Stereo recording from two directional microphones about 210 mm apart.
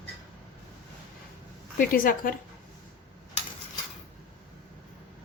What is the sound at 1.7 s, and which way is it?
Speech, 45° left (ahead or behind).